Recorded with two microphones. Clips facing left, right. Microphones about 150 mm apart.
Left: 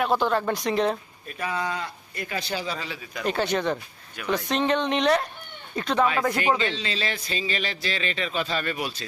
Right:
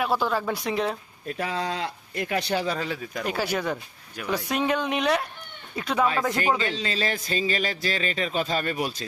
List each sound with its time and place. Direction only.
0.0 s speech: 5° right (ahead or behind)
1.3 s speech: 85° right; by 3.2 s 45° right (ahead or behind)
3.2 s speech: 5° right (ahead or behind)
6.7 s speech: 45° right (ahead or behind)